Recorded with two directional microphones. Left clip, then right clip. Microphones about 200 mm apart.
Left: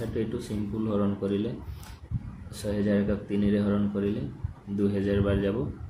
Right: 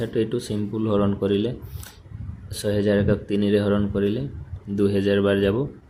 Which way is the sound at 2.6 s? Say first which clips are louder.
Right 7 dB; 40° right (ahead or behind).